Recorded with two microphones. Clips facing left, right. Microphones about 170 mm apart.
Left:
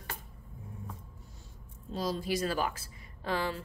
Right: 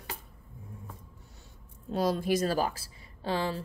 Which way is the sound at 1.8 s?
60° right (ahead or behind).